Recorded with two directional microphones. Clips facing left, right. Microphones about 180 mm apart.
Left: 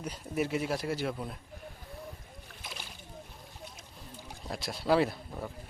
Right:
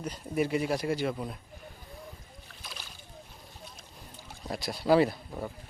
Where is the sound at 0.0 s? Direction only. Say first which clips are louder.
Right 3 dB; 5° left (ahead or behind).